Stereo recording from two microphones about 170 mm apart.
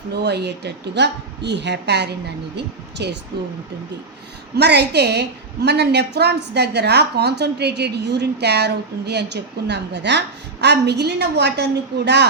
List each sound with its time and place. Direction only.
0.1 s a woman's voice: 75° right (ahead or behind)
4.5 s a woman's voice: 75° right (ahead or behind)